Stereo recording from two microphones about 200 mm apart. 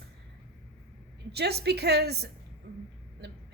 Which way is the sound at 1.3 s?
55° right (ahead or behind).